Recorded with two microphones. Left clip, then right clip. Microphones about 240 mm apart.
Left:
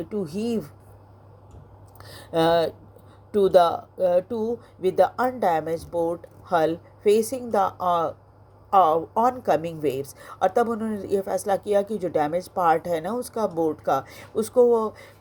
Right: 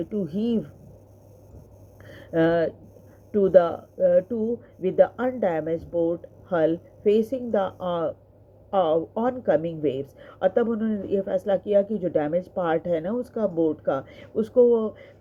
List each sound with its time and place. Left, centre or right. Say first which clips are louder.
0.0 s speech: even; left
2.0 s a sound: left 2 dB; left
3.3 s speech: left 1 dB; left